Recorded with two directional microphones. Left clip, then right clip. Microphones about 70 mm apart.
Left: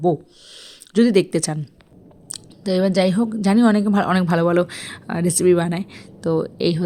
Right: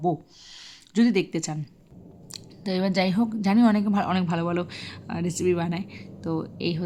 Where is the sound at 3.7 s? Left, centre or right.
Left.